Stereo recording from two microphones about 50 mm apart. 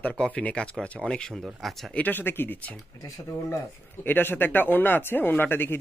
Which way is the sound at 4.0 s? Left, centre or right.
Left.